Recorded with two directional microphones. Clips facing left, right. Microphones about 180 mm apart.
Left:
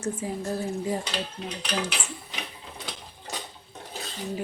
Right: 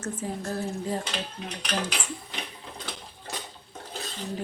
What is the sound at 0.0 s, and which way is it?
Speech, 10° left (ahead or behind).